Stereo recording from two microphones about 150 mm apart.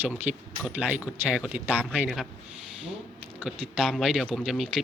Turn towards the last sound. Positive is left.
turn(degrees=0)  # may be behind; listen again after turning